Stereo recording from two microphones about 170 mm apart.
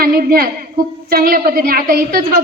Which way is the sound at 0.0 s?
60° right (ahead or behind).